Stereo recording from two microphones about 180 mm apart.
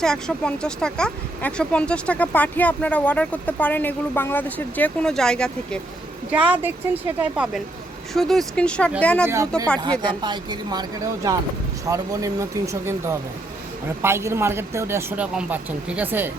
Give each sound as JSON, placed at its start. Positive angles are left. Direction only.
{"t": 0.0, "sound": "speech", "side_deg": 5}
{"t": 6.3, "sound": "speech", "side_deg": -10}
{"t": 9.2, "sound": "speech", "side_deg": -15}